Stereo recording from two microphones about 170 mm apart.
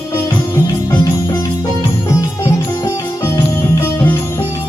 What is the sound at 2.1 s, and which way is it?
Music, 20° left (ahead or behind).